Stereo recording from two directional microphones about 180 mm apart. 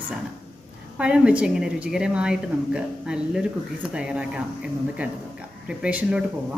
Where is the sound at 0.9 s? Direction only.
5° right (ahead or behind).